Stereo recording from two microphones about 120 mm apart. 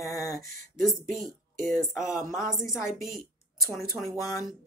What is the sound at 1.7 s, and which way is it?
Speech, 5° right (ahead or behind).